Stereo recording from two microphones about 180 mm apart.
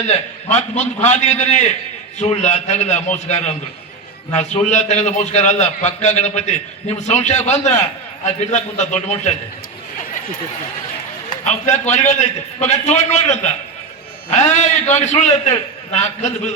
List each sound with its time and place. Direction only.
0.1 s a man's voice: 40° left (ahead or behind)
11.4 s a man's voice: 40° left (ahead or behind)